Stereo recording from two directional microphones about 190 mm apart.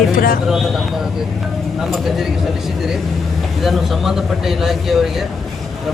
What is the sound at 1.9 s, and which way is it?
Speech, centre (ahead or behind).